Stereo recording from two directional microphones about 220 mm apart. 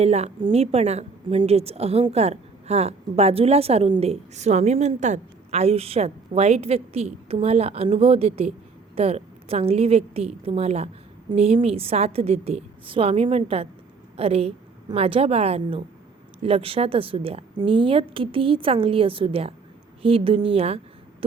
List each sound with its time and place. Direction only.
0.0 s a woman's voice: 30° right (ahead or behind)